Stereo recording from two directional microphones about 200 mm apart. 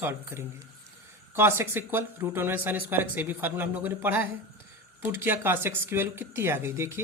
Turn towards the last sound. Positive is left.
turn(degrees=-10)  # may be behind; listen again after turning